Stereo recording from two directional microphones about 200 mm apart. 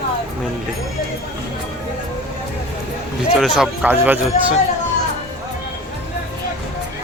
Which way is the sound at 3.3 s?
Centre (ahead or behind).